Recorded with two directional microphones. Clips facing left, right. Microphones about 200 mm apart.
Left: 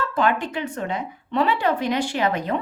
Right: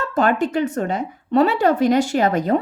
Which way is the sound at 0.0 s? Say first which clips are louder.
Right 4 dB; 45° right (ahead or behind).